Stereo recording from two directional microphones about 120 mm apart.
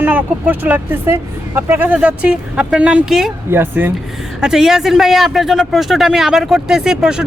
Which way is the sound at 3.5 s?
15° right (ahead or behind).